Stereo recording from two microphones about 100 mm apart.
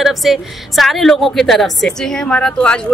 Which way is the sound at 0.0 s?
Centre (ahead or behind).